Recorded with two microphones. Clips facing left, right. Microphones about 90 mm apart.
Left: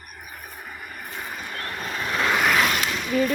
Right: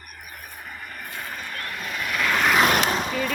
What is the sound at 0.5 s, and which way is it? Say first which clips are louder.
Vehicle: right 1 dB; 10° left (ahead or behind).